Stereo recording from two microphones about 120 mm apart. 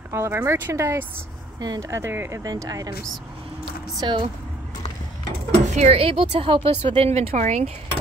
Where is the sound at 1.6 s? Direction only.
30° right (ahead or behind).